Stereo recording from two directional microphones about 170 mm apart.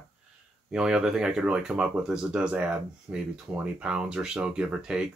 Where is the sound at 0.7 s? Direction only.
5° right (ahead or behind).